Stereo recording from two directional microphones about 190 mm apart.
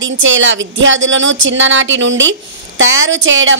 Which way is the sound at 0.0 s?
90° right.